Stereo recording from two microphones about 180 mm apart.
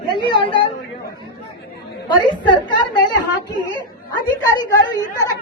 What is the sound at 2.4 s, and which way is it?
A woman's voice, 25° left (ahead or behind).